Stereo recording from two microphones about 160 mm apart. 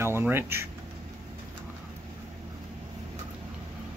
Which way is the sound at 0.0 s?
15° right (ahead or behind).